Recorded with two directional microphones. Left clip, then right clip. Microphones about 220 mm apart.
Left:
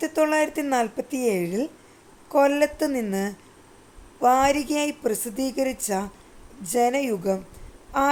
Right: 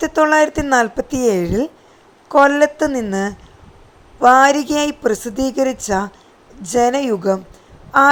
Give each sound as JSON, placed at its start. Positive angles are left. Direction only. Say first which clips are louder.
{"t": 0.0, "sound": "a woman's voice", "louder": "right 9 dB", "side_deg": -15}
{"t": 2.9, "sound": "a woman's voice", "louder": "right 6 dB", "side_deg": 0}
{"t": 4.2, "sound": "a woman's voice", "louder": "right 9 dB", "side_deg": -15}